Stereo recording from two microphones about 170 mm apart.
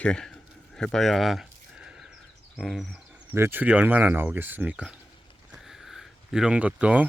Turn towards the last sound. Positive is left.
turn(degrees=-10)  # may be behind; listen again after turning